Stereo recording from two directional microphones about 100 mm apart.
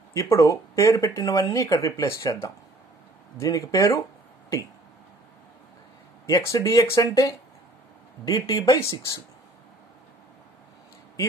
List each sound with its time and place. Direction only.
0.1 s speech: 30° left (ahead or behind)
6.2 s speech: 35° left (ahead or behind)